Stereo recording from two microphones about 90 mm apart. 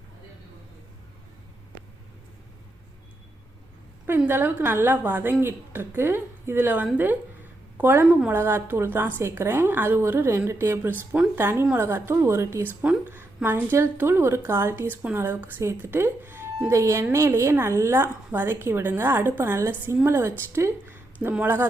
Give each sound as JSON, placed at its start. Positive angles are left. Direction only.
{"t": 4.3, "sound": "a woman's voice", "side_deg": -25}
{"t": 12.6, "sound": "a woman's voice", "side_deg": -20}
{"t": 16.6, "sound": "a woman's voice", "side_deg": -35}